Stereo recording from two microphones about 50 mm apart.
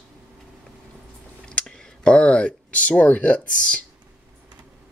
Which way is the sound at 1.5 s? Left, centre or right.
Centre.